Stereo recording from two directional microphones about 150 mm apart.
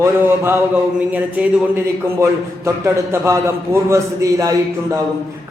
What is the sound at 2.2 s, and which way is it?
A man's voice, 20° right (ahead or behind).